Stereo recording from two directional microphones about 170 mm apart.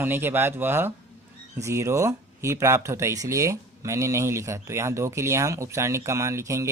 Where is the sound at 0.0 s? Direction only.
10° right (ahead or behind).